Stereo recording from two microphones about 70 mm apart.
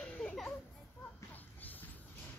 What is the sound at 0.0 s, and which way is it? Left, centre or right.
Children playing, centre.